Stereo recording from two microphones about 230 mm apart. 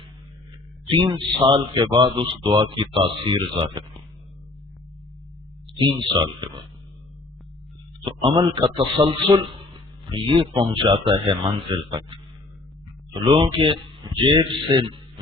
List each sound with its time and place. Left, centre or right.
0.9 s a man's voice: right
5.7 s a man's voice: right
8.0 s a man's voice: right
13.3 s a man's voice: right